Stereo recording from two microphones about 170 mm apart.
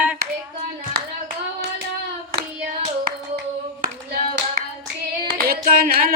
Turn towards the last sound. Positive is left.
turn(degrees=-60)  # may be behind; listen again after turning